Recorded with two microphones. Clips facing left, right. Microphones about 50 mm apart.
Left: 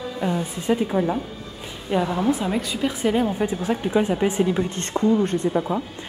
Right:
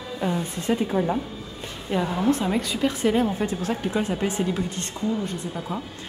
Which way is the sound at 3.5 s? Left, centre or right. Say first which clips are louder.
Left 3 dB; centre.